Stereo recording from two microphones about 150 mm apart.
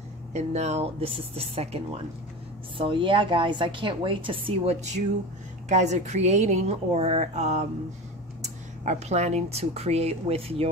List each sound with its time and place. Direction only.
0.3 s a woman's voice: 50° right (ahead or behind)
2.8 s a woman's voice: 35° right (ahead or behind)